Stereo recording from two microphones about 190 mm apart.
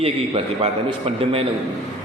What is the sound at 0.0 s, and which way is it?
A man's voice, 30° right (ahead or behind).